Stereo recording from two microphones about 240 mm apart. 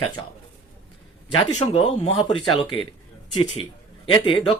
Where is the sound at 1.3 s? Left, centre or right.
Left.